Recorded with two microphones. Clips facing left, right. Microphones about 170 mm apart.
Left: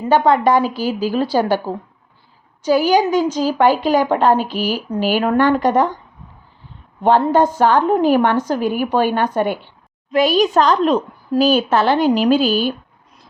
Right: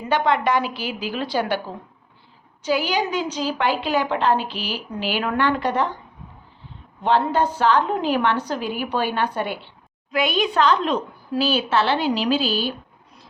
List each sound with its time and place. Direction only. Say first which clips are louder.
0.0 s a woman's voice: left 7 dB; 40° left (ahead or behind)
7.0 s a woman's voice: left 6 dB; 45° left (ahead or behind)
10.1 s a woman's voice: left 7 dB; 35° left (ahead or behind)